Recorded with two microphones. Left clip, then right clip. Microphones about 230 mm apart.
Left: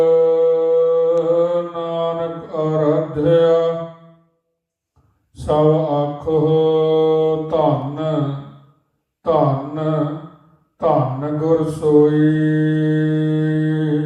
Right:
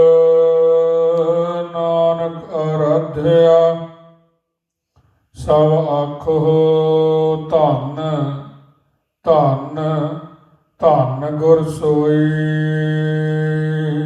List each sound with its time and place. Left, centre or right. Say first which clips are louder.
0.0 s music: right 3 dB; right
3.2 s mantra: right 4 dB; right
5.3 s mantra: right 2 dB; right
9.2 s a sound: right 3 dB; right
10.8 s mantra: right 4 dB; right